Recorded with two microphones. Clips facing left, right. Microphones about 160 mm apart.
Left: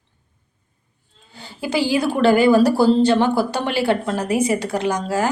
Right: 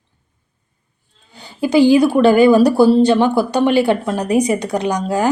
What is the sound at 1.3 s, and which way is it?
A woman's voice, 15° right (ahead or behind).